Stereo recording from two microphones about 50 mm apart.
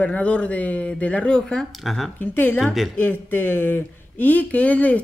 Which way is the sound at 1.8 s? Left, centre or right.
Centre.